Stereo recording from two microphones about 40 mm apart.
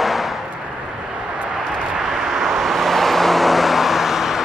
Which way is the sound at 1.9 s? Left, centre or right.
Centre.